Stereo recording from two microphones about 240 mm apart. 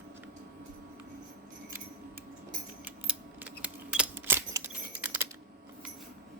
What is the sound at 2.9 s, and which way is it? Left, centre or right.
Keys jangling, centre.